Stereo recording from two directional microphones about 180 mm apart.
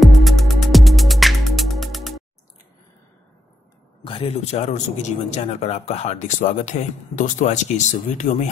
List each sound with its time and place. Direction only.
0.0 s music: centre (ahead or behind)
4.0 s a man's voice: 30° left (ahead or behind)